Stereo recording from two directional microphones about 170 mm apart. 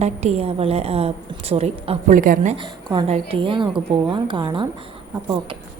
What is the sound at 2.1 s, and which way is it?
Speech, 50° right (ahead or behind).